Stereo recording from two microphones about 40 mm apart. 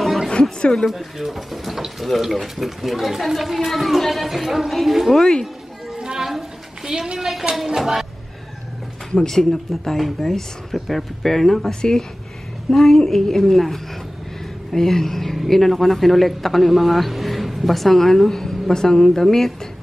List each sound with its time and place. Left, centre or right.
0.0 s a sound: centre
0.3 s speech: left
0.8 s speech: centre
5.9 s a sound: centre
7.2 s speech: centre
9.1 s speech: centre
12.7 s speech: centre